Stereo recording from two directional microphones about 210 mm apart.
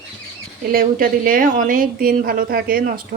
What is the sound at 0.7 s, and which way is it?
A woman's voice, 40° right (ahead or behind).